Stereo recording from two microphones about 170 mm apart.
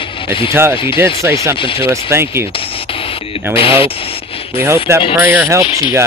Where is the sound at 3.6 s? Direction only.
35° left (ahead or behind).